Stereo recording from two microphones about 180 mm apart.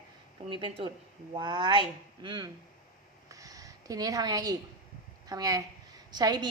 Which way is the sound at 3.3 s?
20° right (ahead or behind).